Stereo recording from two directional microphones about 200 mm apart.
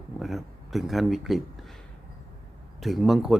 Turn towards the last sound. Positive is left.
turn(degrees=0)  # may be behind; listen again after turning